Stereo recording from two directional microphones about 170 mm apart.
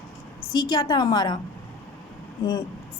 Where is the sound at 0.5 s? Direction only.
25° left (ahead or behind).